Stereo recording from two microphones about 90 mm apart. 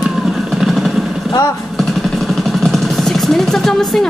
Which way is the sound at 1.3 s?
40° left (ahead or behind).